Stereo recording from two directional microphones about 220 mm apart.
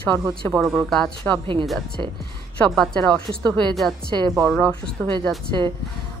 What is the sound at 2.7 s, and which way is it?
Speech, 5° left (ahead or behind).